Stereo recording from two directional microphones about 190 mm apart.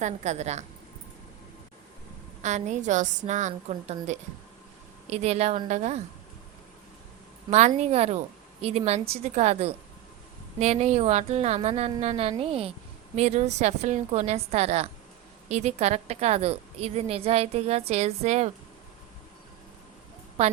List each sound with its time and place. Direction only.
0.0 s a woman's voice: 40° right (ahead or behind)
2.4 s a woman's voice: 40° right (ahead or behind)
7.5 s a woman's voice: 35° right (ahead or behind)
20.4 s a woman's voice: 35° right (ahead or behind)